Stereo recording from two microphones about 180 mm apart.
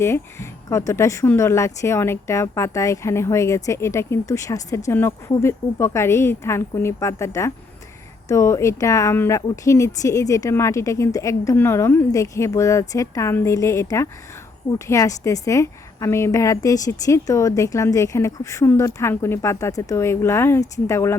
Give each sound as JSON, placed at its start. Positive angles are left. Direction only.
{"t": 0.0, "sound": "speech", "side_deg": 15}